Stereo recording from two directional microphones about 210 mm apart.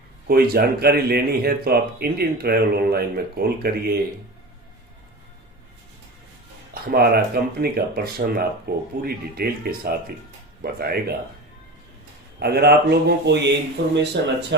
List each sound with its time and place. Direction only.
0.3 s speech: 45° right (ahead or behind)
6.7 s speech: 45° right (ahead or behind)
12.4 s speech: 50° right (ahead or behind)